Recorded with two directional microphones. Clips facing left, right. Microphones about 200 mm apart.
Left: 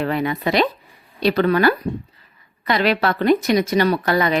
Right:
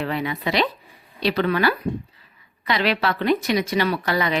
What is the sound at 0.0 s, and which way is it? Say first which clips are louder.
A woman's voice: left 4 dB; 50° left (ahead or behind).